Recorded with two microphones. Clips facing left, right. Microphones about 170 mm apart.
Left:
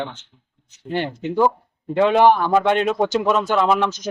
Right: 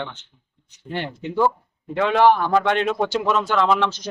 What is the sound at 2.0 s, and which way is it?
Speech, 15° left (ahead or behind).